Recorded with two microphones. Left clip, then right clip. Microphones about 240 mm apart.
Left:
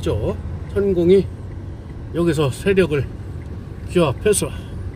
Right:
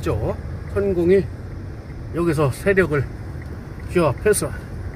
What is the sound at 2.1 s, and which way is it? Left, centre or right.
A man's voice, centre.